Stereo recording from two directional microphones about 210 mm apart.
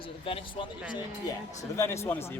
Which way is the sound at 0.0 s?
25° left (ahead or behind).